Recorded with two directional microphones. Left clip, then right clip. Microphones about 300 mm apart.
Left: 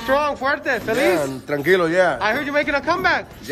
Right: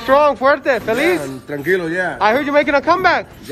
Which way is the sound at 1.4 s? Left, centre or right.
Left.